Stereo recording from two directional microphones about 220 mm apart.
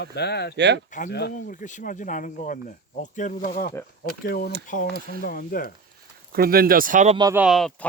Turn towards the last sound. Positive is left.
turn(degrees=0)  # may be behind; listen again after turning